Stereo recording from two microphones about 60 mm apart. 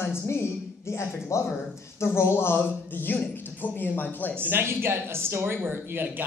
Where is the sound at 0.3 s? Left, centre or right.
Left.